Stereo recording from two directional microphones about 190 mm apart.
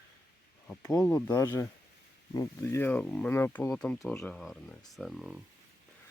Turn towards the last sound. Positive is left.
turn(degrees=0)  # may be behind; listen again after turning